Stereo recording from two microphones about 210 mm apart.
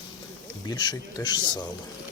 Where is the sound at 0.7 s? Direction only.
20° left (ahead or behind).